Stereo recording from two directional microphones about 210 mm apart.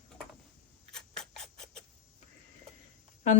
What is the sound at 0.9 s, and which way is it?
Rodents, centre (ahead or behind).